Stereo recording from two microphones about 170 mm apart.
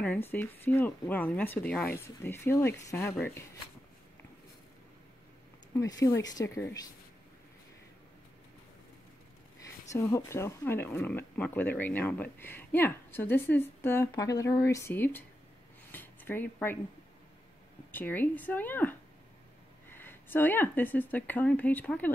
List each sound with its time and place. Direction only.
0.0 s speech: 10° left (ahead or behind)
5.8 s speech: 20° left (ahead or behind)
9.6 s speech: 15° left (ahead or behind)
15.9 s a sound: 10° left (ahead or behind)
17.9 s speech: 10° left (ahead or behind)